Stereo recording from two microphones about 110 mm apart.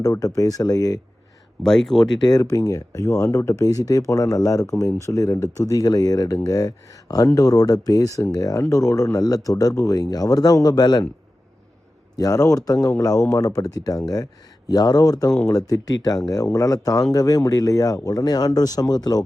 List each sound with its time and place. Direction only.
0.0 s speech: 35° left (ahead or behind)
1.6 s speech: 5° left (ahead or behind)
2.2 s speech: 35° left (ahead or behind)
12.1 s speech: 35° left (ahead or behind)